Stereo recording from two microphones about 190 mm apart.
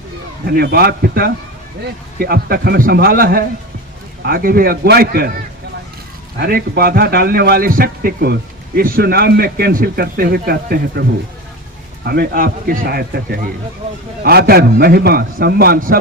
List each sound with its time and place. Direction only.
0.4 s a man's voice: 55° right (ahead or behind)
6.3 s a man's voice: 55° right (ahead or behind)
12.0 s a man's voice: 55° right (ahead or behind)